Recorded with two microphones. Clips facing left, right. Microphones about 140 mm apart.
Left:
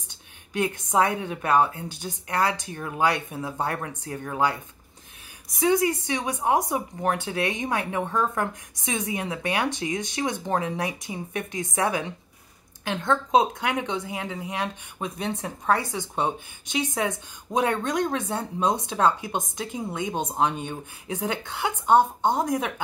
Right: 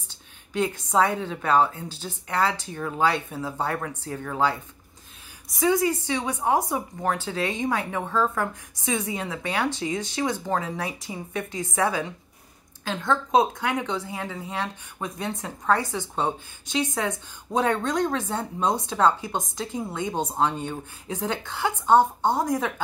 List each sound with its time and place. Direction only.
0.8 s a woman's voice: 20° left (ahead or behind)
5.7 s speech: 20° left (ahead or behind)